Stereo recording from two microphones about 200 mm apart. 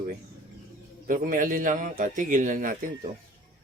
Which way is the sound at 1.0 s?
40° right (ahead or behind).